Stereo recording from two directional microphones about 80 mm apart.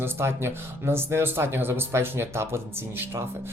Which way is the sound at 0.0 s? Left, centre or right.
Right.